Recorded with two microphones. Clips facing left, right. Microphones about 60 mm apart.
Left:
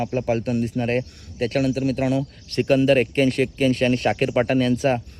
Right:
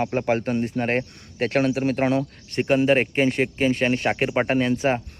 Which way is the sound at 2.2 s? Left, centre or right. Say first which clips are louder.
Left 1 dB; right.